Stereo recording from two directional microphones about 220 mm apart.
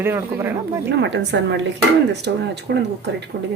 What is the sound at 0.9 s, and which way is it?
Speech, 50° right (ahead or behind).